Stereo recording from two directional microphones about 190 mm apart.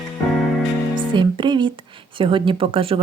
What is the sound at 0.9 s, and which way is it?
Music, 25° right (ahead or behind).